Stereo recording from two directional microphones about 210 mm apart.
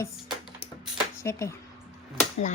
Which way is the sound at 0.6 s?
25° left (ahead or behind).